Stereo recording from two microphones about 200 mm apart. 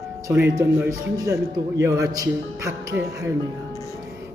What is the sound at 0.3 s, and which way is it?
A man's voice, 15° right (ahead or behind).